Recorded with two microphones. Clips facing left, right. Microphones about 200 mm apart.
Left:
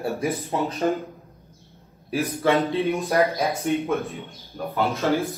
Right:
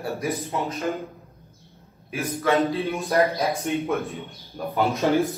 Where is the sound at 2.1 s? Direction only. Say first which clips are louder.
Left 1 dB; 30° left (ahead or behind).